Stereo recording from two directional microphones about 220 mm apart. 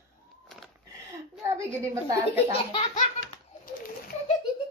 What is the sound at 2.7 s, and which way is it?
Laughter, 25° left (ahead or behind).